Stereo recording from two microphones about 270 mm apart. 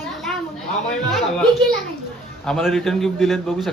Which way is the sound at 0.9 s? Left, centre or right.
Centre.